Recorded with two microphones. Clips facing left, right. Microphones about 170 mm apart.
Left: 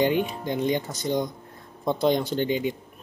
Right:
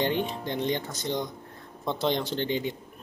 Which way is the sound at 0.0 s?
10° left (ahead or behind).